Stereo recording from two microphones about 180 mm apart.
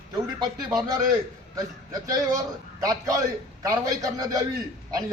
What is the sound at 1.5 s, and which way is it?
A man's voice, 20° right (ahead or behind).